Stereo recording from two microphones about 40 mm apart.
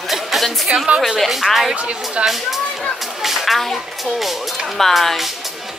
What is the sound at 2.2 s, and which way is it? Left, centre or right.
Speech, centre.